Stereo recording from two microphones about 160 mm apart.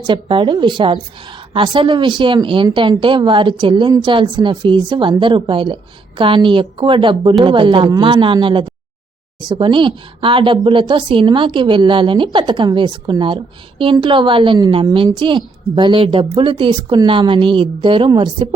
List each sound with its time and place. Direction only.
0.1 s speech: 30° right (ahead or behind)